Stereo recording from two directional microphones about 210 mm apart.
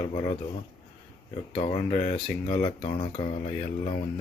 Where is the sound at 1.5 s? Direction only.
30° left (ahead or behind).